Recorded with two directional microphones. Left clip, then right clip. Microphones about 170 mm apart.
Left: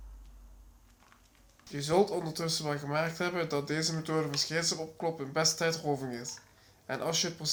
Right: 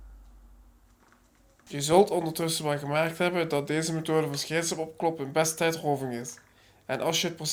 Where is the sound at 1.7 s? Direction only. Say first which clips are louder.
Right 6 dB; 25° right (ahead or behind).